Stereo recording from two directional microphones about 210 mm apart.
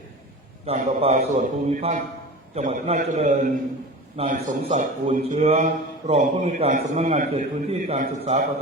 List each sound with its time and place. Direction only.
0.6 s a man's voice: 30° right (ahead or behind)